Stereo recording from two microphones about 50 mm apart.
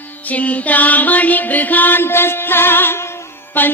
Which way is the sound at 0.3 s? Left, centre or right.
Left.